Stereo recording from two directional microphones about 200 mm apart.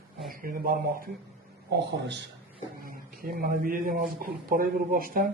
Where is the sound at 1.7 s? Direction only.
60° right (ahead or behind).